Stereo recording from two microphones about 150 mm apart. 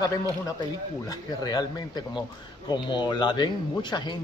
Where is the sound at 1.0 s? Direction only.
25° left (ahead or behind).